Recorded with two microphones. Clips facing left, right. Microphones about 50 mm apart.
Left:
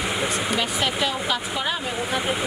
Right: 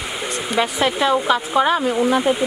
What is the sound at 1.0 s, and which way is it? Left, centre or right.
Speech, right.